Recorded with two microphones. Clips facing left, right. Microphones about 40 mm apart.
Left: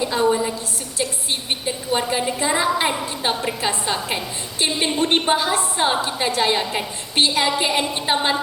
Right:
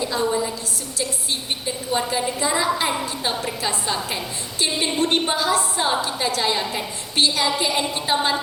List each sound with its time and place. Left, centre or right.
0.0 s a woman's voice: left